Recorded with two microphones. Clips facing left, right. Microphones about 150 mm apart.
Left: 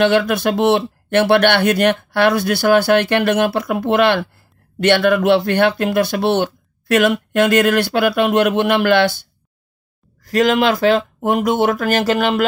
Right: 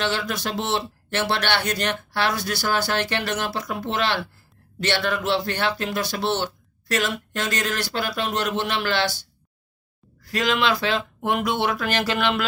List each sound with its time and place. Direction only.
0.0 s speech: 55° left (ahead or behind)